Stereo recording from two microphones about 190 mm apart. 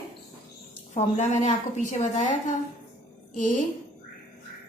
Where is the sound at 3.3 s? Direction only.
45° left (ahead or behind).